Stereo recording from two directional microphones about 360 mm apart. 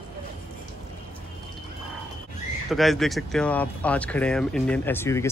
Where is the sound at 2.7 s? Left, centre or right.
Centre.